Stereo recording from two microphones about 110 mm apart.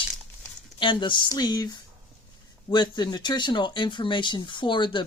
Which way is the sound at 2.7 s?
40° left (ahead or behind).